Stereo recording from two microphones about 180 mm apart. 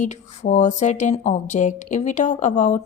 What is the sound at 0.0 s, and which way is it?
Speech, 40° left (ahead or behind).